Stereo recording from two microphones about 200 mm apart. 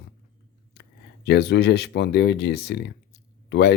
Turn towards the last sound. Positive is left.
turn(degrees=55)  # may be behind; listen again after turning